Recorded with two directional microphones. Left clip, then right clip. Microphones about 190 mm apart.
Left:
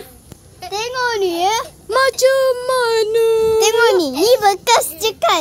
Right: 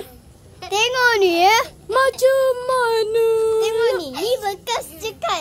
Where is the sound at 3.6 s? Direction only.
50° left (ahead or behind).